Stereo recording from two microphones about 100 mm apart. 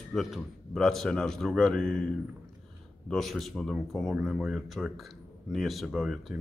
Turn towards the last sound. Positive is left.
turn(degrees=0)  # may be behind; listen again after turning